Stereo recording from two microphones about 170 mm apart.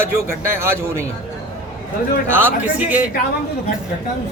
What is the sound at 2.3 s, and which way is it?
Speech, 10° right (ahead or behind).